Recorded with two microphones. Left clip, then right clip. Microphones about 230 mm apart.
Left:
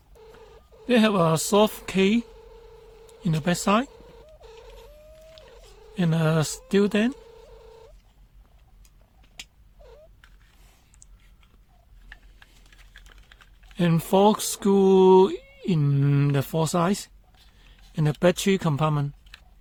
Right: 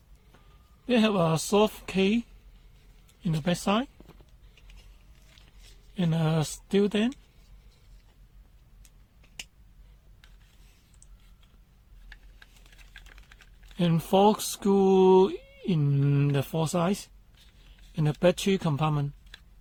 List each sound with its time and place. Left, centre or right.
0.9 s speech: left
3.2 s speech: left
6.0 s speech: left
13.1 s typing: centre
13.7 s speech: left